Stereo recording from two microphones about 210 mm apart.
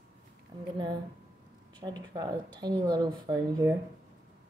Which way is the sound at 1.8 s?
20° right (ahead or behind).